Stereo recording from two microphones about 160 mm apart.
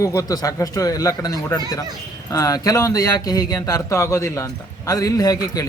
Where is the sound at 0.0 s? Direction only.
20° left (ahead or behind).